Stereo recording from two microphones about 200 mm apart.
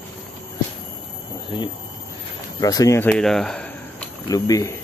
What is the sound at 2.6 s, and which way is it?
Speech, 15° left (ahead or behind).